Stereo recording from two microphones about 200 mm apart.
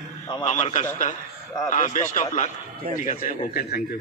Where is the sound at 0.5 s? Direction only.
35° left (ahead or behind).